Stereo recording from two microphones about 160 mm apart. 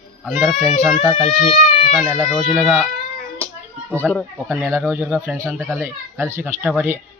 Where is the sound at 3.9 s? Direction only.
10° left (ahead or behind).